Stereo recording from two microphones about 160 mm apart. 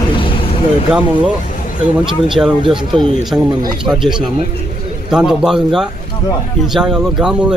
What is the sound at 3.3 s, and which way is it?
Speech, 10° right (ahead or behind).